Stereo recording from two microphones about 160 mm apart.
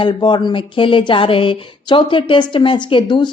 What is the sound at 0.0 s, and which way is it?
Speech, 30° left (ahead or behind).